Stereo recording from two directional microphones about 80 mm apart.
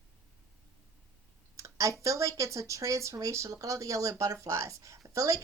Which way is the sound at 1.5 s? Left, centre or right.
Right.